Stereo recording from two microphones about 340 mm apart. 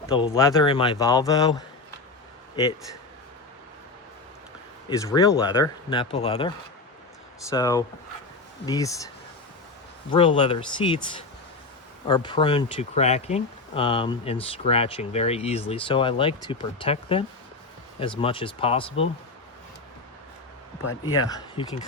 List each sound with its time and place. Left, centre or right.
0.2 s speech: centre
4.9 s speech: centre
7.5 s speech: centre
10.1 s speech: centre
21.2 s speech: centre